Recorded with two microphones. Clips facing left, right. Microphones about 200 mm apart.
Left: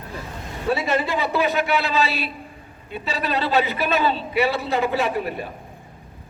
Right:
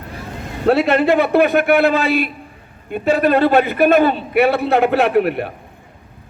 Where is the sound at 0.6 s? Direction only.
65° right (ahead or behind).